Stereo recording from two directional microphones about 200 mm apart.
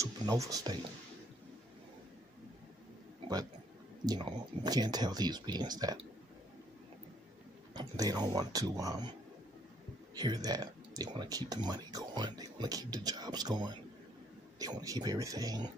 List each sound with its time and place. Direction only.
0.0 s speech: 15° right (ahead or behind)
4.0 s speech: 20° right (ahead or behind)
7.7 s speech: 20° right (ahead or behind)
10.1 s speech: 20° right (ahead or behind)